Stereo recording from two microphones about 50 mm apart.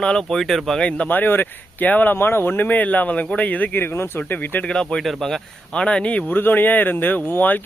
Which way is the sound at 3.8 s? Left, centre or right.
Left.